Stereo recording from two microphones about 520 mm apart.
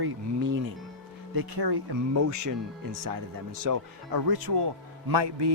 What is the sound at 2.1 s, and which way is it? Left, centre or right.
Speech, right.